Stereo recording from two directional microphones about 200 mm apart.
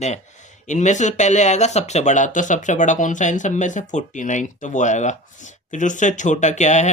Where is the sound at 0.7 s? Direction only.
35° left (ahead or behind).